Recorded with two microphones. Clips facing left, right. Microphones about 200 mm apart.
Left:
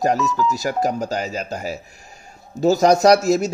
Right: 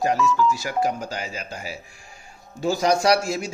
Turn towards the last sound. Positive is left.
turn(degrees=40)  # may be behind; listen again after turning